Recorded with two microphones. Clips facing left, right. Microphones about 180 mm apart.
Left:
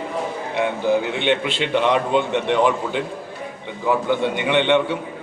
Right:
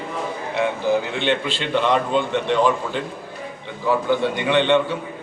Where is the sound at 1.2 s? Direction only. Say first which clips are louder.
Left 2 dB; 15° left (ahead or behind).